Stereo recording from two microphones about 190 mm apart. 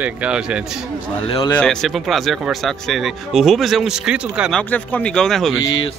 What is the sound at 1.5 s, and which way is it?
Speech, 5° left (ahead or behind).